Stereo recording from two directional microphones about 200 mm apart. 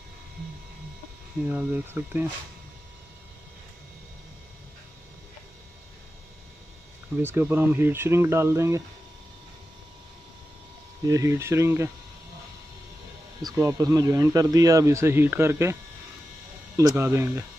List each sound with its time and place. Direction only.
1.5 s a man's voice: 10° right (ahead or behind)
7.2 s a man's voice: 10° right (ahead or behind)
11.1 s a man's voice: 15° right (ahead or behind)
13.4 s a man's voice: 15° right (ahead or behind)